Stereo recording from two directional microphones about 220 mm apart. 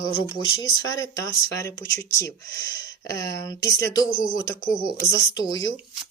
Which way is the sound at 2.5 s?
55° left (ahead or behind).